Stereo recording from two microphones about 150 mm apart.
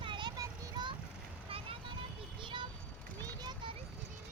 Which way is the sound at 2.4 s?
35° right (ahead or behind).